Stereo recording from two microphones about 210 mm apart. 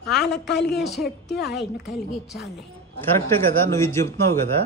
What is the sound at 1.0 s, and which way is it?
Speech, 50° left (ahead or behind).